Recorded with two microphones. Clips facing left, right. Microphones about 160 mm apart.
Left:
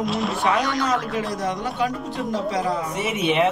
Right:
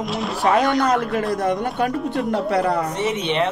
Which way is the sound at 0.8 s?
55° right (ahead or behind).